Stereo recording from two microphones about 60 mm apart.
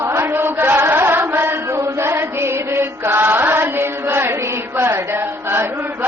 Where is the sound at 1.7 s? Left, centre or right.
Right.